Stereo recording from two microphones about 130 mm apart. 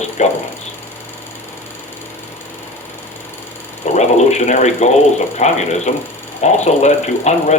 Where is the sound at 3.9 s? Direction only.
60° left (ahead or behind).